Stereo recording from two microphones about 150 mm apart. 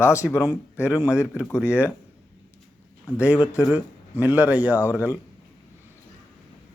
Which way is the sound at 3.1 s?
10° right (ahead or behind).